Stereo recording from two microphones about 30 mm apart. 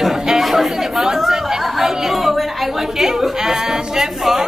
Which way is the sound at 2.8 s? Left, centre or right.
Centre.